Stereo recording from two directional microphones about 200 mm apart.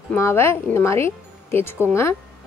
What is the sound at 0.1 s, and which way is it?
Speech, 10° left (ahead or behind).